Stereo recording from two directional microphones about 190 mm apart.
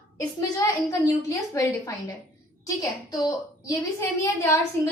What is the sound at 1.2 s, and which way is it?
A woman's voice, 15° left (ahead or behind).